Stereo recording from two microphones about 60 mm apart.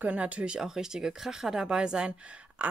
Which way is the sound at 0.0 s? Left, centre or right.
Right.